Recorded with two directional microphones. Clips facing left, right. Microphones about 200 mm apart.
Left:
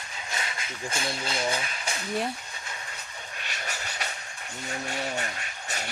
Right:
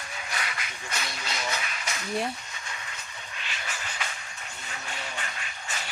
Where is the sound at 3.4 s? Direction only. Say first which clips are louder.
Left 1 dB; 40° left (ahead or behind).